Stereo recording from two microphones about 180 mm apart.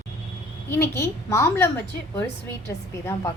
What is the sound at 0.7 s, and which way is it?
A woman's voice, 15° left (ahead or behind).